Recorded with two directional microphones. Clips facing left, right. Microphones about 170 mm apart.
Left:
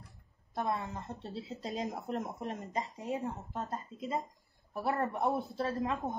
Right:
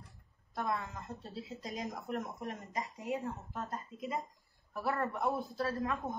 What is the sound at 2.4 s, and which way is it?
A woman's voice, 20° left (ahead or behind).